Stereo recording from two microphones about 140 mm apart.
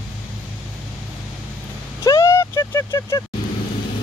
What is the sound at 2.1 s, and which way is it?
Vehicle, 20° left (ahead or behind).